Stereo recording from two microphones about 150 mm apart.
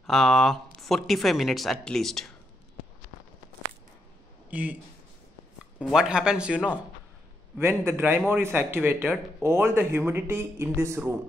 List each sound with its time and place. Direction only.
0.0 s speech: centre (ahead or behind)
4.5 s speech: 10° right (ahead or behind)
5.8 s speech: 5° right (ahead or behind)
7.5 s speech: 15° right (ahead or behind)